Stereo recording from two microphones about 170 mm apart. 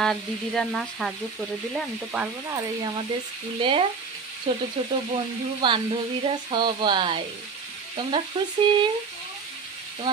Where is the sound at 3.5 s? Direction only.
30° right (ahead or behind).